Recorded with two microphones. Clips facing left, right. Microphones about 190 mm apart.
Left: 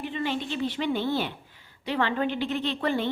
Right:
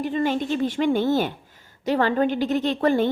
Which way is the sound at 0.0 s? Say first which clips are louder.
Right 7 dB; 45° right (ahead or behind).